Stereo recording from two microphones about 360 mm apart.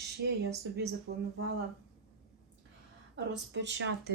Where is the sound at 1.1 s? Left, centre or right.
Right.